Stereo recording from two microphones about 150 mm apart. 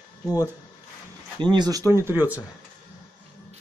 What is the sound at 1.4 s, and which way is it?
Speech, 30° right (ahead or behind).